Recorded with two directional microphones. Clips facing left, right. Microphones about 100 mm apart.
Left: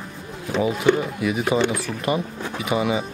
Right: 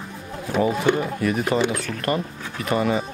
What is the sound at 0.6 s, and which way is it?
Speech, centre (ahead or behind).